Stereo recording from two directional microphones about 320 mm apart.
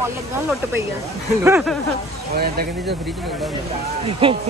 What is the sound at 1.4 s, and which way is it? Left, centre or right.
Speech, centre.